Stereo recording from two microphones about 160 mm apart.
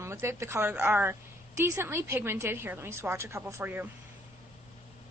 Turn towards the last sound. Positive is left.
turn(degrees=-10)  # may be behind; listen again after turning